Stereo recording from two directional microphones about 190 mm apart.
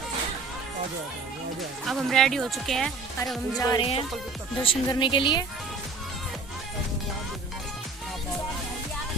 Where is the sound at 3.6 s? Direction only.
20° left (ahead or behind).